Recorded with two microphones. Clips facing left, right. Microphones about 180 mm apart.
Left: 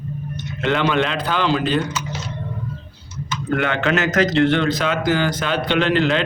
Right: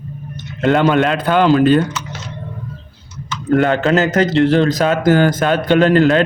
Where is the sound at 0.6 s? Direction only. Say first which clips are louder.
Right 6 dB; 45° right (ahead or behind).